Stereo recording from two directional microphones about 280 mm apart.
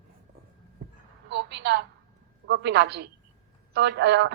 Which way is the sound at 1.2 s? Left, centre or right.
Right.